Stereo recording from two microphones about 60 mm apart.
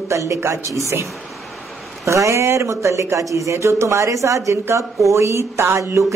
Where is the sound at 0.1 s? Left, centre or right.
Right.